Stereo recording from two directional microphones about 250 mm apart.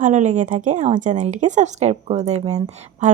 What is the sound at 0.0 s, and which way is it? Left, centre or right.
Speech, right.